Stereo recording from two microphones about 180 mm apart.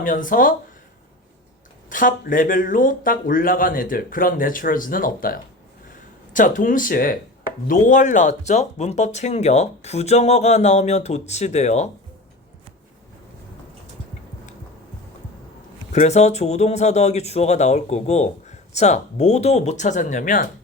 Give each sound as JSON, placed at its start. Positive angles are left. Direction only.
{"t": 0.0, "sound": "speech", "side_deg": 50}
{"t": 1.9, "sound": "speech", "side_deg": 50}
{"t": 15.9, "sound": "speech", "side_deg": 40}